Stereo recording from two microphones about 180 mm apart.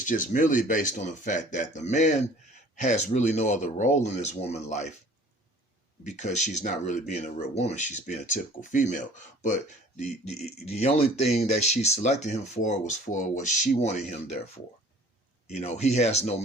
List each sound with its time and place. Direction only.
0.0 s speech: 45° left (ahead or behind)
6.1 s speech: 40° left (ahead or behind)
10.0 s speech: 35° left (ahead or behind)